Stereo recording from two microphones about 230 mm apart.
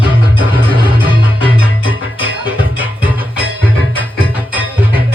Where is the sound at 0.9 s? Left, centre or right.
Left.